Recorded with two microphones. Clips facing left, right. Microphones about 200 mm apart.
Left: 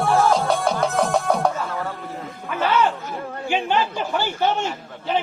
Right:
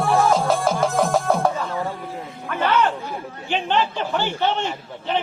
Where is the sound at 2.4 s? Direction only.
10° left (ahead or behind).